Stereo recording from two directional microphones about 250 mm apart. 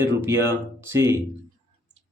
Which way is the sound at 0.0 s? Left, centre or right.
Centre.